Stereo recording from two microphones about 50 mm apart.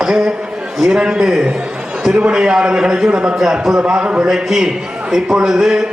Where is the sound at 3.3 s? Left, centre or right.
Centre.